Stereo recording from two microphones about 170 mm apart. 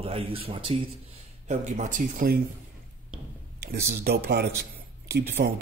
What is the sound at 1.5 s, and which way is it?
Speech, 45° right (ahead or behind).